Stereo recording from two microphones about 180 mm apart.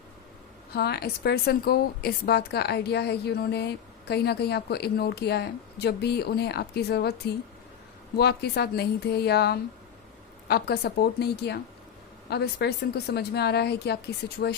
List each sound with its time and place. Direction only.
0.7 s a woman's voice: 65° left (ahead or behind)